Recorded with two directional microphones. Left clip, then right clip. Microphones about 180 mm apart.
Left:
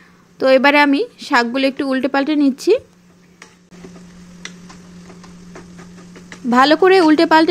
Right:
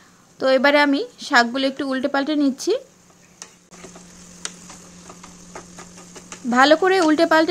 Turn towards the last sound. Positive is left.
turn(degrees=15)  # may be behind; listen again after turning